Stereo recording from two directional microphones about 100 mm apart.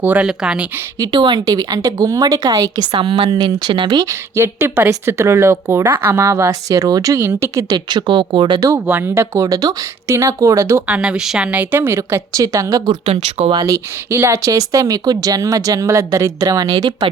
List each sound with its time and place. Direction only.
0.0 s a woman's voice: 15° right (ahead or behind)
0.9 s a woman's voice: 50° right (ahead or behind)
2.9 s a woman's voice: 65° right (ahead or behind)
4.4 s speech: 25° right (ahead or behind)
7.7 s a woman's voice: 45° right (ahead or behind)
8.7 s a woman's voice: 25° right (ahead or behind)
10.8 s a woman's voice: 10° right (ahead or behind)
11.7 s a woman's voice: 25° right (ahead or behind); by 13.0 s 40° right (ahead or behind)
13.7 s a woman's voice: 25° right (ahead or behind)